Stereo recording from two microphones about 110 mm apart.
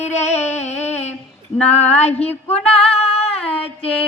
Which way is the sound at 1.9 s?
80° left.